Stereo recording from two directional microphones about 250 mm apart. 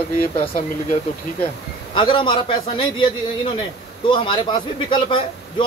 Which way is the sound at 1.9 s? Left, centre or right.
Centre.